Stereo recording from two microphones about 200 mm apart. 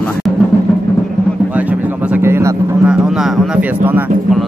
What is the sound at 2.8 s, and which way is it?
Speech, centre (ahead or behind).